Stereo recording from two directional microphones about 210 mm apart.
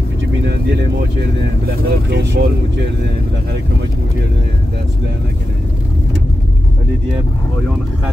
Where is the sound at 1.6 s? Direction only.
55° right (ahead or behind).